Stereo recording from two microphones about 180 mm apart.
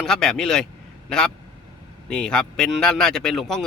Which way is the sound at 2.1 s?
5° left (ahead or behind).